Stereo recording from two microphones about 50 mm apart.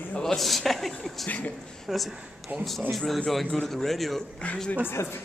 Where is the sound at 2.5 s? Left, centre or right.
Right.